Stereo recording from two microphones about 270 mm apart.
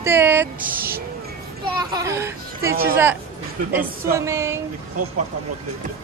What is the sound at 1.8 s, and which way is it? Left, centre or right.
Speech, centre.